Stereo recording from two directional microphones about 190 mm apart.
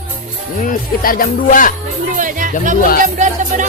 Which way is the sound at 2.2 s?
45° right (ahead or behind).